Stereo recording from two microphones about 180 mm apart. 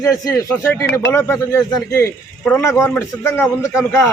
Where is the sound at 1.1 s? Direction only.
15° left (ahead or behind).